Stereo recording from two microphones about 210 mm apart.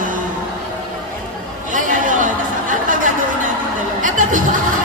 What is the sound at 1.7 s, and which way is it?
Chatter, 40° right (ahead or behind).